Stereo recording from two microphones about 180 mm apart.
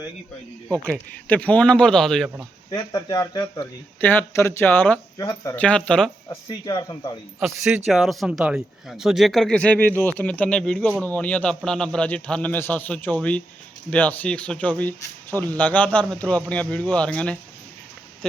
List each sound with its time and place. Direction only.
1.3 s speech: 5° left (ahead or behind)
2.6 s speech: 20° left (ahead or behind)
5.6 s speech: 5° left (ahead or behind)
6.2 s speech: 25° left (ahead or behind)
7.4 s speech: centre (ahead or behind)